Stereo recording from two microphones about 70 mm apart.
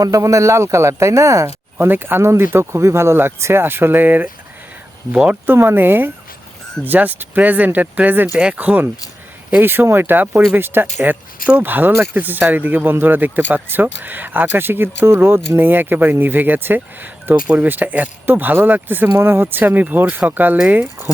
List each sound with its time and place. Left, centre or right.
0.0 s speech: right
1.9 s speech: right
5.1 s speech: centre
5.5 s speech: right
17.3 s speech: centre